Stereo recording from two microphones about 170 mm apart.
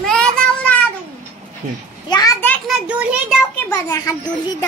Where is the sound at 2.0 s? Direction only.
25° left (ahead or behind).